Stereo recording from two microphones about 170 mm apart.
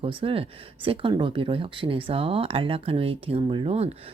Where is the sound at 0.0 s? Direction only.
30° right (ahead or behind).